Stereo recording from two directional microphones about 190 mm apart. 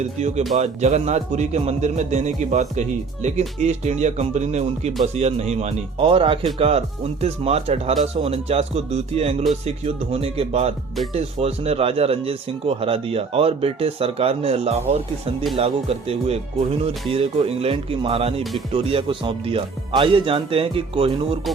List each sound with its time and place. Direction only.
0.0 s a man's voice: 35° right (ahead or behind)